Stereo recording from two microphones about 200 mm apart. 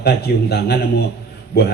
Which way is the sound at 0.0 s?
55° left (ahead or behind).